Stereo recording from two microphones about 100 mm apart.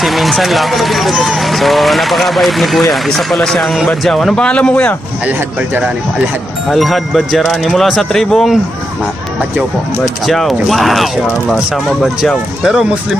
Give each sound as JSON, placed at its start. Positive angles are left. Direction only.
{"t": 0.0, "sound": "speech", "side_deg": 0}
{"t": 6.7, "sound": "speech", "side_deg": 0}
{"t": 10.2, "sound": "speech", "side_deg": 0}